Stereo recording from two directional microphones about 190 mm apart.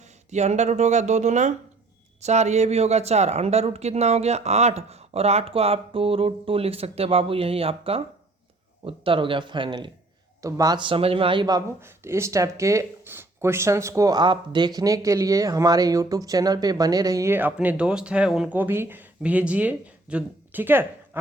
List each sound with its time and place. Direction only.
0.3 s speech: 35° right (ahead or behind); by 21.2 s 10° right (ahead or behind)